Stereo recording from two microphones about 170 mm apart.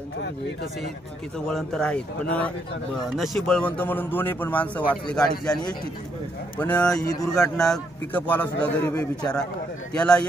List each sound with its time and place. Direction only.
1.5 s a man's voice: centre (ahead or behind)
6.6 s a man's voice: 5° left (ahead or behind)
7.1 s speech: 20° left (ahead or behind)
7.7 s a man's voice: 10° left (ahead or behind)
9.9 s speech: 5° left (ahead or behind)